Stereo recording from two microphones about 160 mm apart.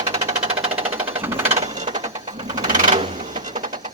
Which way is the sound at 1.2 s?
15° right (ahead or behind).